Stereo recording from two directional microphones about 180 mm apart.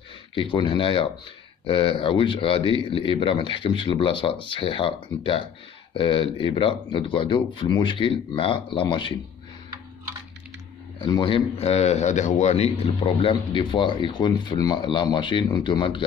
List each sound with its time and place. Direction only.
0.3 s a man's voice: 30° left (ahead or behind)
11.0 s a man's voice: 25° left (ahead or behind)